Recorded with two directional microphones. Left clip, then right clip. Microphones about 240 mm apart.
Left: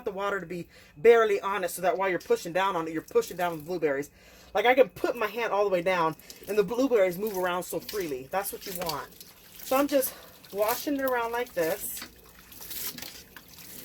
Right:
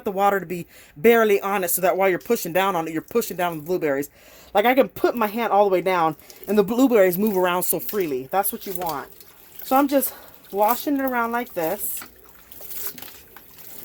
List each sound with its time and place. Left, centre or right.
0.0 s speech: right
9.6 s speech: right